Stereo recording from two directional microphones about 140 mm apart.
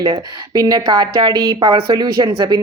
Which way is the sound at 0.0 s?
25° right (ahead or behind).